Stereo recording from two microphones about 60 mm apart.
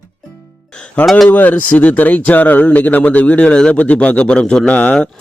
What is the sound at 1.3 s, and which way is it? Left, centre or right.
Speech, left.